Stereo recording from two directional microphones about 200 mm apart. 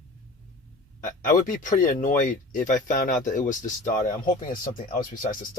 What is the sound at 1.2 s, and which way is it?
Speech, 40° left (ahead or behind).